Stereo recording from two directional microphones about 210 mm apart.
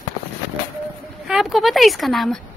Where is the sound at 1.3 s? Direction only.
Centre (ahead or behind).